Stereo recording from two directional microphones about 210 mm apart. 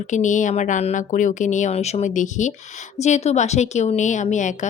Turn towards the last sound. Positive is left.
turn(degrees=35)  # may be behind; listen again after turning